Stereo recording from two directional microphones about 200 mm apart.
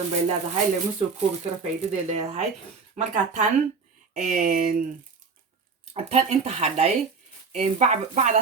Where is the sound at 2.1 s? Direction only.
35° right (ahead or behind).